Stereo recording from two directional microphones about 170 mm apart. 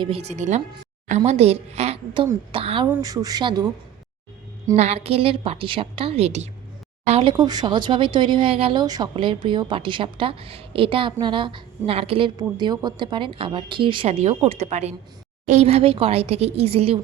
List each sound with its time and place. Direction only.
0.0 s a woman's voice: 35° right (ahead or behind)
2.9 s speech: 20° right (ahead or behind)
4.7 s a woman's voice: 40° right (ahead or behind)